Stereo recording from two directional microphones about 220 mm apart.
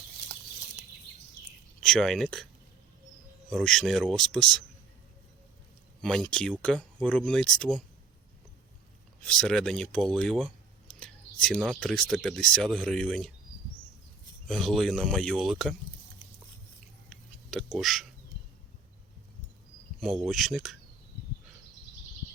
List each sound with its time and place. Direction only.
1.8 s speech: centre (ahead or behind)
3.5 s speech: 5° left (ahead or behind)
6.0 s speech: 5° left (ahead or behind)
9.2 s speech: 5° left (ahead or behind)
14.4 s speech: centre (ahead or behind)
17.1 s a sound: 5° left (ahead or behind)
20.0 s speech: centre (ahead or behind)